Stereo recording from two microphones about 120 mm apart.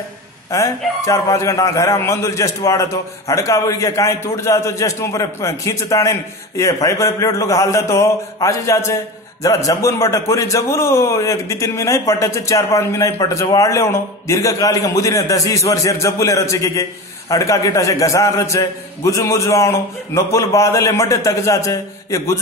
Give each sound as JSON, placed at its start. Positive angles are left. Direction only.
{"t": 0.5, "sound": "a man's voice", "side_deg": 25}